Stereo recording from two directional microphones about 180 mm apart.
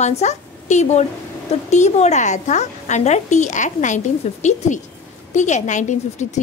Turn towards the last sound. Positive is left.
turn(degrees=40)  # may be behind; listen again after turning